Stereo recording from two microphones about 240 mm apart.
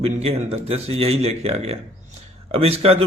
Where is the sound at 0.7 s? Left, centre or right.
Right.